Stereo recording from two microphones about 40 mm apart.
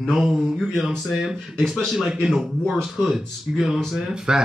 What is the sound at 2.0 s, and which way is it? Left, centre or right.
Speech, centre.